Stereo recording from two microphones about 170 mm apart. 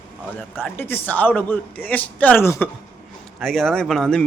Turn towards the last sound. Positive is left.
turn(degrees=5)  # may be behind; listen again after turning